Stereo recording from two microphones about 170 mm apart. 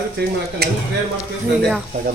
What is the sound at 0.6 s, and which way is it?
Speech, 70° right (ahead or behind).